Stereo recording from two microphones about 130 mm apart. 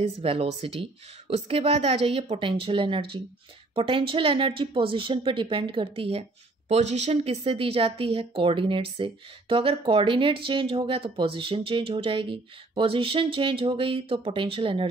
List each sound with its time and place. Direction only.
0.2 s speech: 50° right (ahead or behind)
6.7 s speech: 60° right (ahead or behind)